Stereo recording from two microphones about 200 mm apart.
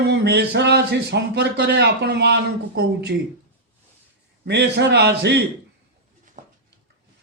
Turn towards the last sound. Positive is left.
turn(degrees=-40)  # may be behind; listen again after turning